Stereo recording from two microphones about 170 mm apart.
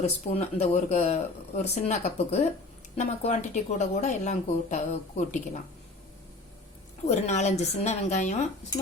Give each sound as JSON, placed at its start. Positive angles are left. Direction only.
{"t": 0.0, "sound": "speech", "side_deg": 40}
{"t": 7.3, "sound": "speech", "side_deg": 40}